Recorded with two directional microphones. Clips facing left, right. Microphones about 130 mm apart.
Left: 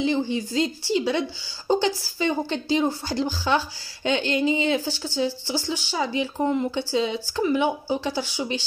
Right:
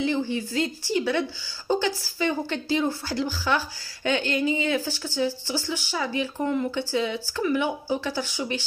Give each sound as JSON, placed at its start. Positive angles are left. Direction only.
{"t": 0.0, "sound": "a woman's voice", "side_deg": 20}